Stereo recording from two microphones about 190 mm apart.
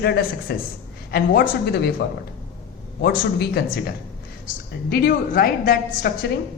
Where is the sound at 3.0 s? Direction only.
55° left (ahead or behind).